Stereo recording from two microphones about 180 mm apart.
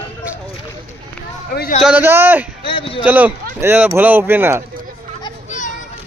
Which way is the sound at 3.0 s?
10° right (ahead or behind).